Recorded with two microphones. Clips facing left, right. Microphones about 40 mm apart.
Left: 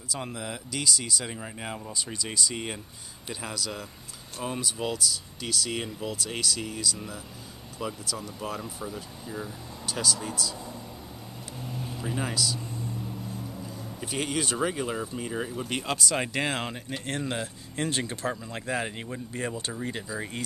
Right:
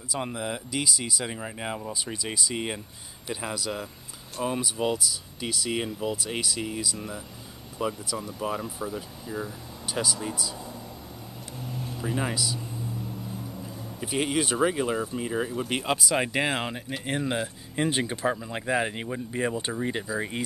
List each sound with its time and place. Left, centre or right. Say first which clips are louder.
0.1 s speech: right 4 dB; centre
11.6 s vehicle: right 2 dB; centre
13.3 s speech: even; centre